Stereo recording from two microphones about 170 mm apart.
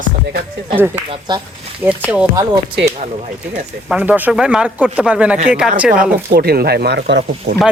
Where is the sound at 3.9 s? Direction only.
10° right (ahead or behind).